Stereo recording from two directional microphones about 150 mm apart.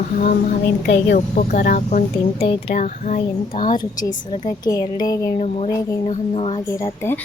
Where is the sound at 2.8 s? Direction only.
55° left (ahead or behind).